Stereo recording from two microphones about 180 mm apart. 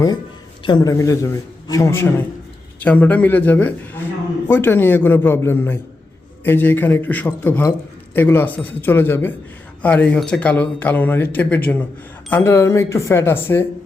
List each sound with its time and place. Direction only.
0.6 s speech: 25° left (ahead or behind)